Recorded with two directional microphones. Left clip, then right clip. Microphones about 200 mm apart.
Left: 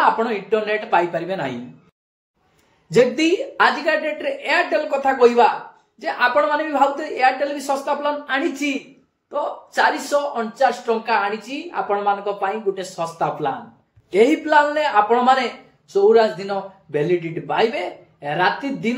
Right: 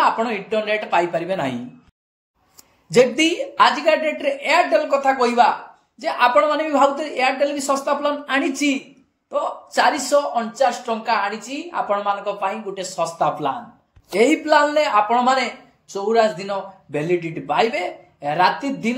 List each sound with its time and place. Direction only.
0.0 s speech: 35° right (ahead or behind)
2.9 s speech: 35° right (ahead or behind)